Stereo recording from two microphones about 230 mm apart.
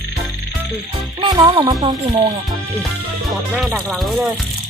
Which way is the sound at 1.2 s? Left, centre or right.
Centre.